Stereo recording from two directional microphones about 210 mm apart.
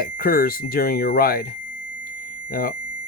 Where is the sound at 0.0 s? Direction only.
45° left (ahead or behind).